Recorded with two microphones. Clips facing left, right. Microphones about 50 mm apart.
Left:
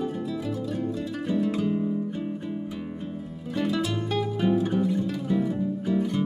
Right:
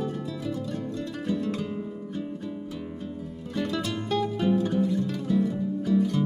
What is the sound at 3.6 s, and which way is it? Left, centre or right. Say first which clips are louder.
Music: left 3 dB; centre.